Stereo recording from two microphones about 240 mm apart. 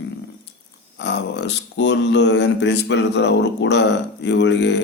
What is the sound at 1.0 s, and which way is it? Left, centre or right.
Speech, left.